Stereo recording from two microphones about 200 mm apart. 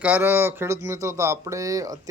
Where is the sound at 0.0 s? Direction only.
10° right (ahead or behind).